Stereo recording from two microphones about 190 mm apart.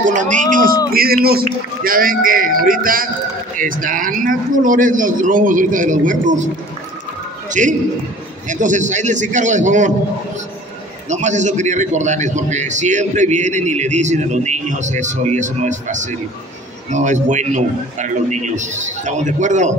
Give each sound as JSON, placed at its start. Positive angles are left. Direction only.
{"t": 0.0, "sound": "a man's voice", "side_deg": -40}
{"t": 7.6, "sound": "a man's voice", "side_deg": -40}
{"t": 11.1, "sound": "a man's voice", "side_deg": -40}